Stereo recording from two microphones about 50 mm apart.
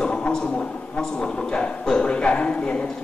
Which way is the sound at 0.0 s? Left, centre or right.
Centre.